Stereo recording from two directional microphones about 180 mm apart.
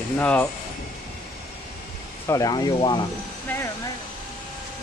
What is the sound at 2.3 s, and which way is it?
Speech, 20° left (ahead or behind).